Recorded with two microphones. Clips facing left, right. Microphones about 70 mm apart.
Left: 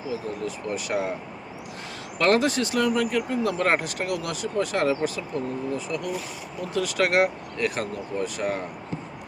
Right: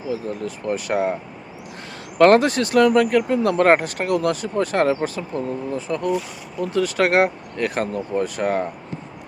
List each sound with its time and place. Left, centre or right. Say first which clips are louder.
0.1 s speech: right 4 dB; right
2.1 s speech: right 7 dB; right
3.7 s speech: right 8 dB; right